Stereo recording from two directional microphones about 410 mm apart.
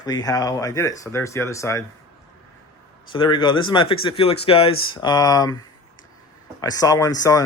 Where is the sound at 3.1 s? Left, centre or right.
Centre.